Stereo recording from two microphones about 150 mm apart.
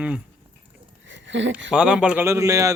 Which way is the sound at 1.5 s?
5° right (ahead or behind).